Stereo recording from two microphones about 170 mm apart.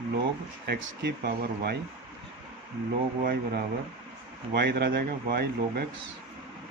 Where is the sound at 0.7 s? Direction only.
70° right (ahead or behind).